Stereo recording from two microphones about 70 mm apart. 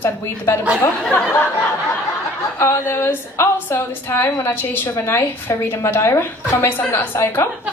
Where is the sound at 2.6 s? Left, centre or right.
Left.